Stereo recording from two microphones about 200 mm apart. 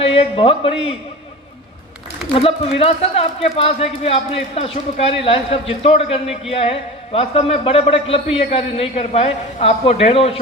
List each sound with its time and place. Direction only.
0.1 s a man's voice: 30° left (ahead or behind)
2.3 s a man's voice: 30° left (ahead or behind)